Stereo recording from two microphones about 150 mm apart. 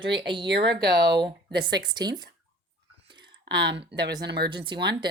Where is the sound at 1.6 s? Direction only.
30° right (ahead or behind).